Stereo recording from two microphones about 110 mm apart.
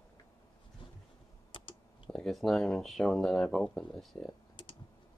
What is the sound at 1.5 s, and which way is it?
Clicking, 50° left (ahead or behind).